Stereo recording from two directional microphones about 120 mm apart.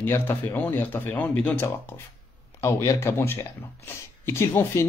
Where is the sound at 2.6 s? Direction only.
25° left (ahead or behind).